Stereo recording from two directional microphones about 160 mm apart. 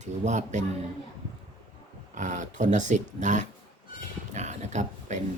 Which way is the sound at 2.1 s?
50° right (ahead or behind).